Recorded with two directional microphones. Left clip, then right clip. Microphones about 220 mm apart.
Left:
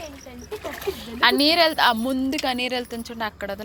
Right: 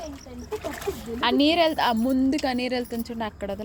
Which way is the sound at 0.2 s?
40° right (ahead or behind).